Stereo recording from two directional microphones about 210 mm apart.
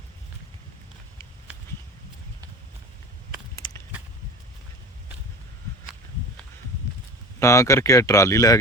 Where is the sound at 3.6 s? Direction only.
20° left (ahead or behind).